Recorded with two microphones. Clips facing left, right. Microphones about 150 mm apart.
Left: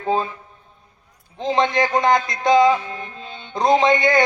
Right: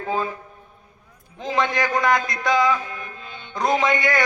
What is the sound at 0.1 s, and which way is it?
Speech, 25° left (ahead or behind).